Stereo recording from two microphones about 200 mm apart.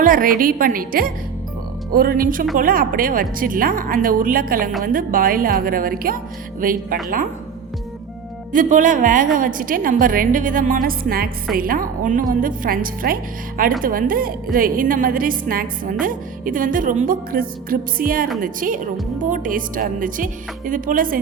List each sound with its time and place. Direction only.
0.0 s a woman's voice: 45° right (ahead or behind)
8.5 s a woman's voice: 40° right (ahead or behind)